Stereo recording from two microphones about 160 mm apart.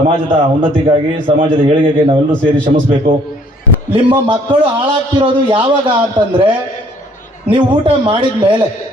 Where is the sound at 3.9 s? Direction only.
30° right (ahead or behind).